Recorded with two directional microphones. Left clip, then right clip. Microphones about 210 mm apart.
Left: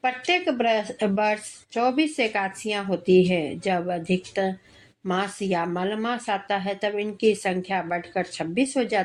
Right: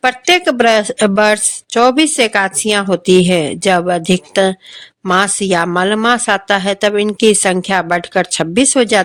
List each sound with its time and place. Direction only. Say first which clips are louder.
0.0 s speech: right 11 dB; 40° right (ahead or behind)